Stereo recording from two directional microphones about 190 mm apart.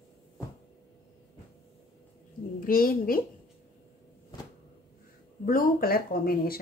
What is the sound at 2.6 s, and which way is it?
Speech, 50° left (ahead or behind).